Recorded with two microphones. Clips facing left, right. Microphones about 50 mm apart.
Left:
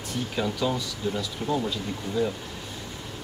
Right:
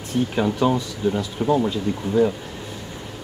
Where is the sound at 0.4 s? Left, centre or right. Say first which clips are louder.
Right 6 dB; right.